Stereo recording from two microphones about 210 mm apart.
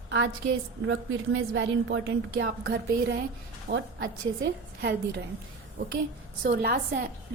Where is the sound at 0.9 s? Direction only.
65° right (ahead or behind).